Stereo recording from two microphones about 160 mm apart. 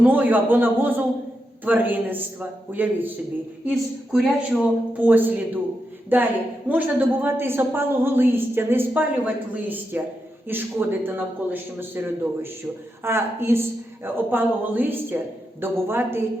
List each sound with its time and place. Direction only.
0.0 s a woman's voice: 10° right (ahead or behind)